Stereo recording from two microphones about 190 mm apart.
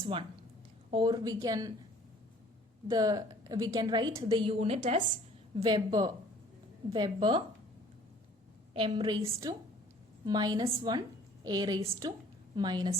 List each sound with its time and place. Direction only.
0.0 s a woman's voice: 30° right (ahead or behind)
2.8 s a woman's voice: 20° right (ahead or behind); by 5.0 s 35° right (ahead or behind)
5.6 s a woman's voice: 20° right (ahead or behind)
8.7 s a woman's voice: 25° right (ahead or behind)